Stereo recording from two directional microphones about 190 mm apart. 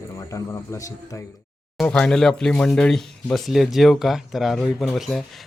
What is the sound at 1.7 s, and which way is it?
Speech, 5° left (ahead or behind).